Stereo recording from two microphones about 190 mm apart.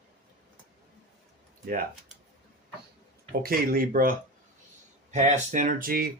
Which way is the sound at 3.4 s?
50° right (ahead or behind).